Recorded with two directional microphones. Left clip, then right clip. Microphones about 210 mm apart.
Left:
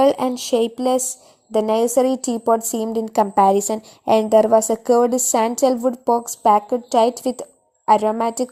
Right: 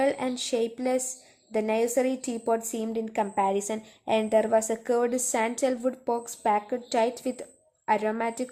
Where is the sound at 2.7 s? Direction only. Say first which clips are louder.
Left 9 dB; 25° left (ahead or behind).